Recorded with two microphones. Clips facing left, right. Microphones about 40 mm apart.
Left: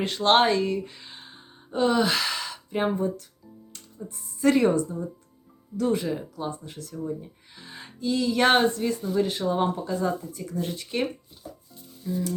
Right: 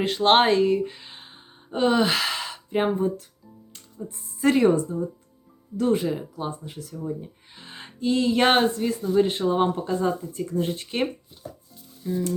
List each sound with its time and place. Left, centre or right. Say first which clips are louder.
0.0 s speech: right 2 dB; centre
0.9 s sigh: right 3 dB; centre
2.6 s speech: right 3 dB; right
4.5 s speech: right 2 dB; right
6.1 s speech: right 1 dB; centre
7.5 s music: left 2 dB; right
8.4 s speech: left 3 dB; centre
9.1 s speech: right 5 dB; right
12.0 s music: right 2 dB; right